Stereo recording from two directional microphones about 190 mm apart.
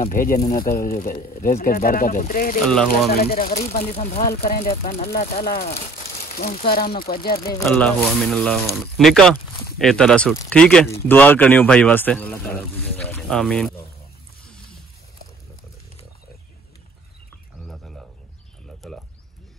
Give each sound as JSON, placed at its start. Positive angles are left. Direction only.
{"t": 0.1, "sound": "speech", "side_deg": 45}
{"t": 2.6, "sound": "speech", "side_deg": 5}
{"t": 3.1, "sound": "speech", "side_deg": 55}
{"t": 7.7, "sound": "speech", "side_deg": 5}
{"t": 17.6, "sound": "frog", "side_deg": 0}
{"t": 18.8, "sound": "a sound", "side_deg": 0}